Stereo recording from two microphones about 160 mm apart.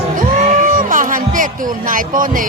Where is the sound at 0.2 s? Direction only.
55° right (ahead or behind).